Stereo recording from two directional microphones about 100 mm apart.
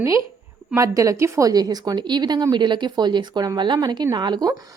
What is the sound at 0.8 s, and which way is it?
Speech, 30° right (ahead or behind).